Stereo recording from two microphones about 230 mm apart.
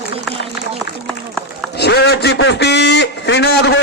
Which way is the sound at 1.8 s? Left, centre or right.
Left.